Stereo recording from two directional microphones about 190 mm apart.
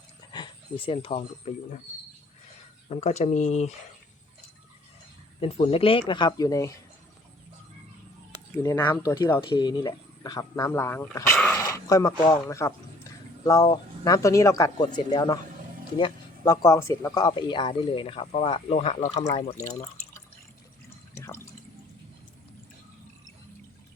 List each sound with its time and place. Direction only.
0.3 s speech: 25° left (ahead or behind)
2.9 s speech: 35° left (ahead or behind)
5.4 s speech: 30° left (ahead or behind)
8.6 s speech: 10° left (ahead or behind)
11.5 s dog: 15° left (ahead or behind)
12.3 s speech: 15° left (ahead or behind); by 19.2 s 35° left (ahead or behind)
21.2 s water: 15° left (ahead or behind)